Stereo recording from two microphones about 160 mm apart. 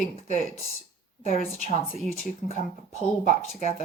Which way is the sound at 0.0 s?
50° left (ahead or behind).